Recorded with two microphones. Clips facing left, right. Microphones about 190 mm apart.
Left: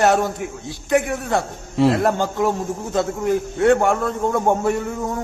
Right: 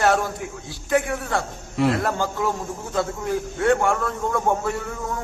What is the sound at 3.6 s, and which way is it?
A man's voice, 25° left (ahead or behind).